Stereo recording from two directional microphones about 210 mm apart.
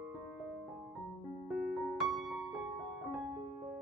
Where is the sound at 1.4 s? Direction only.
Centre (ahead or behind).